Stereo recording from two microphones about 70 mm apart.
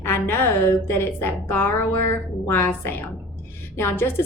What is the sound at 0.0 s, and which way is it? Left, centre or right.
A woman's voice, left.